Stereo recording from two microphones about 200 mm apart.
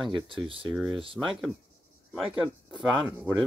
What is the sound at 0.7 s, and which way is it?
Speech, centre (ahead or behind).